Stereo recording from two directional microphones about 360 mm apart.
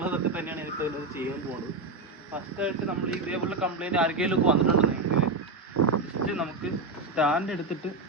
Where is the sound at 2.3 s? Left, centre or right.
Centre.